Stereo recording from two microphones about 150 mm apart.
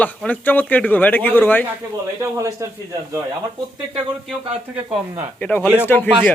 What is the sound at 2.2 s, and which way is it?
Speech, 20° right (ahead or behind).